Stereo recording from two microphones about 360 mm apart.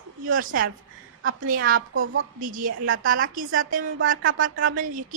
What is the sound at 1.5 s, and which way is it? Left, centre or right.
Speech, right.